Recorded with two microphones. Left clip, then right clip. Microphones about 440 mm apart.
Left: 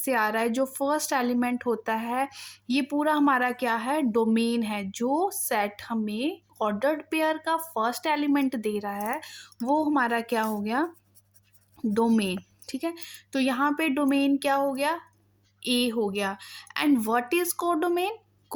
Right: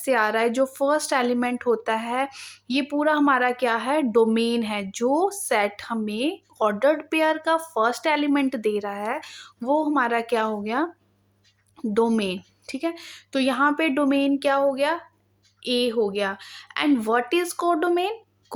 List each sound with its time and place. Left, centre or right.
0.0 s a woman's voice: left